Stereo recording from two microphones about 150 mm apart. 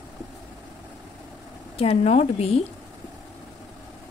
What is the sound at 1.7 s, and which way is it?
Speech, 40° left (ahead or behind).